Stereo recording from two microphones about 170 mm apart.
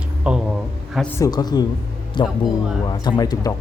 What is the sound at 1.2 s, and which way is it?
Speech, 25° left (ahead or behind).